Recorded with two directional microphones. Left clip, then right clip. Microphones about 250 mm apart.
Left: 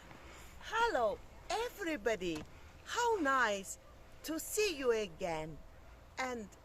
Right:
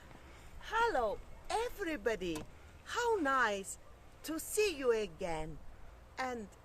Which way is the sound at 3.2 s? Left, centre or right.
Centre.